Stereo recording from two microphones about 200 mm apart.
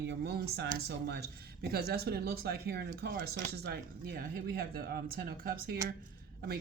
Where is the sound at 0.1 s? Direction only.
55° right (ahead or behind).